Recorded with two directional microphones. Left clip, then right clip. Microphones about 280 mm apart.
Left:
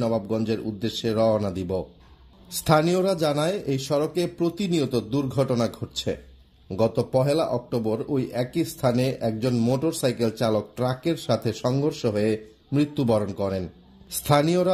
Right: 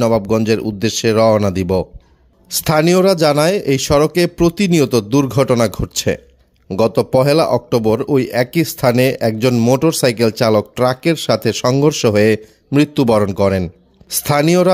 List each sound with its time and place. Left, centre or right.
0.0 s speech: right